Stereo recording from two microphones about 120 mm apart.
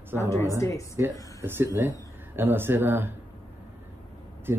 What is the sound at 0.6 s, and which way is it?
Speech, 25° left (ahead or behind).